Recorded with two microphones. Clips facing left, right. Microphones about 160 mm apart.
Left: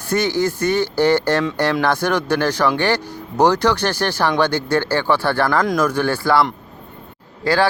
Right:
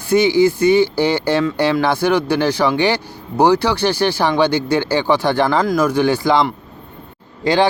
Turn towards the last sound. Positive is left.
turn(degrees=-20)  # may be behind; listen again after turning